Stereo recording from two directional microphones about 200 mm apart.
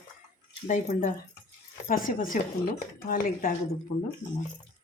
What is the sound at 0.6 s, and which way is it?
Speech, 40° left (ahead or behind).